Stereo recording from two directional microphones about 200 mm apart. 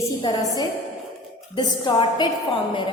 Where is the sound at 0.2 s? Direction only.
20° left (ahead or behind).